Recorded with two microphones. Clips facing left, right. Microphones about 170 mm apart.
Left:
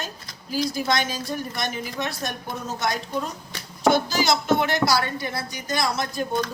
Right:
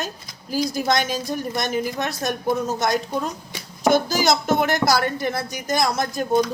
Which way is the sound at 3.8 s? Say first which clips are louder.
Right 2 dB; 45° right (ahead or behind).